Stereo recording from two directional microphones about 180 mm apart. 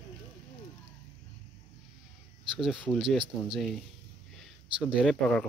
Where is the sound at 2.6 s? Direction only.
Centre (ahead or behind).